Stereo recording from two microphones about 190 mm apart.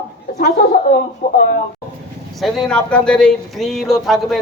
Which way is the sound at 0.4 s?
45° left (ahead or behind).